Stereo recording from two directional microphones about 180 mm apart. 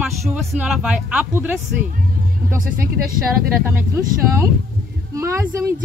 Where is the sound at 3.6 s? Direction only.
10° right (ahead or behind).